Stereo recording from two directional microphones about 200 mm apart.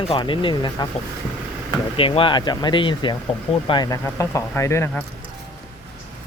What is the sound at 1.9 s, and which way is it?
Speech, 25° left (ahead or behind).